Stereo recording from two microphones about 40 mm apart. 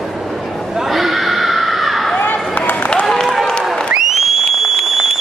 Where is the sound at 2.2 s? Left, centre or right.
Left.